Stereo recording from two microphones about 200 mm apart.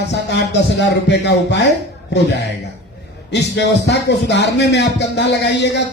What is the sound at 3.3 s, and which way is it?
A man's voice, 60° left (ahead or behind).